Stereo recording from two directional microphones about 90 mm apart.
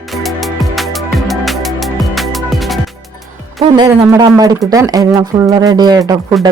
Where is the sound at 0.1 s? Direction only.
Centre (ahead or behind).